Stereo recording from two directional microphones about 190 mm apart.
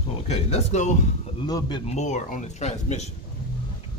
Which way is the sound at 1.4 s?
20° left (ahead or behind).